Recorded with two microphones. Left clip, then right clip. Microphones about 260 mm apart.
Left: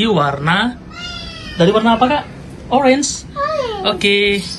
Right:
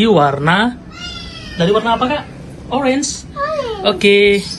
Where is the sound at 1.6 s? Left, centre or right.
Centre.